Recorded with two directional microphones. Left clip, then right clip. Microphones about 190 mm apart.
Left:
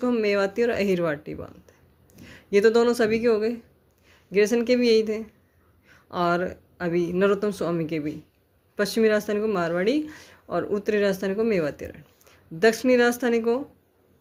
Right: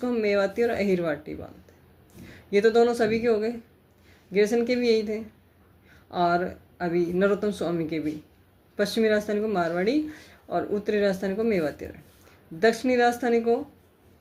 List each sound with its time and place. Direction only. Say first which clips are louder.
0.0 s speech: left 1 dB; 45° left (ahead or behind)